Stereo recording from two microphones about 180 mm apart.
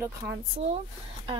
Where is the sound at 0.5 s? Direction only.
35° right (ahead or behind).